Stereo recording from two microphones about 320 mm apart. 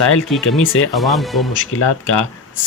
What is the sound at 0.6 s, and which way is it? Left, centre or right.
Speech, left.